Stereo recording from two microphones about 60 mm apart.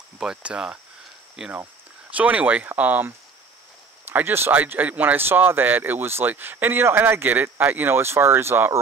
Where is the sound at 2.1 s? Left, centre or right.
Right.